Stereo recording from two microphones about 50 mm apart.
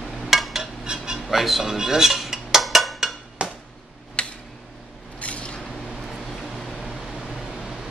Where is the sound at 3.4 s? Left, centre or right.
Right.